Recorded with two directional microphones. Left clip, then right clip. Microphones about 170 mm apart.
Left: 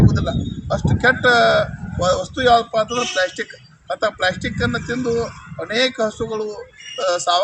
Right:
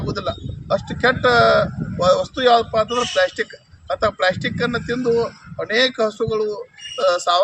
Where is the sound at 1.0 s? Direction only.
30° right (ahead or behind).